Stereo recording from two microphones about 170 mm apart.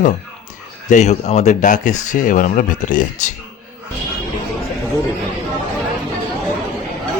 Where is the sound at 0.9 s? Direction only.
40° left (ahead or behind).